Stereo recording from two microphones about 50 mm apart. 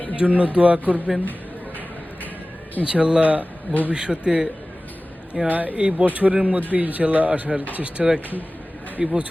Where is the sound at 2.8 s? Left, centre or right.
Centre.